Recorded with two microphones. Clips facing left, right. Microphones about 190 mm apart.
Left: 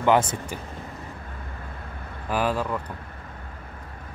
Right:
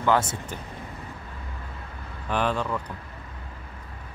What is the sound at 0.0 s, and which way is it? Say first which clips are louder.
Speech: left 3 dB; 15° left (ahead or behind).